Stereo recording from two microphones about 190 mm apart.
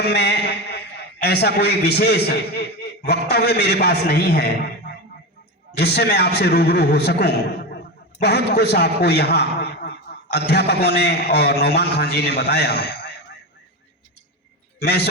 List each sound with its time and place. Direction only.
0.0 s a man's voice: 60° left (ahead or behind)
5.7 s a man's voice: 60° left (ahead or behind)
14.8 s a man's voice: 55° left (ahead or behind)